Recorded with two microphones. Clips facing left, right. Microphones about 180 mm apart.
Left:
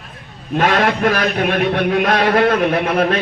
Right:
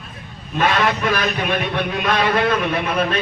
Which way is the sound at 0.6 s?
60° left (ahead or behind).